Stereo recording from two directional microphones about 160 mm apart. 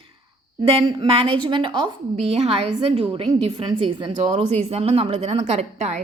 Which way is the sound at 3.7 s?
30° right (ahead or behind).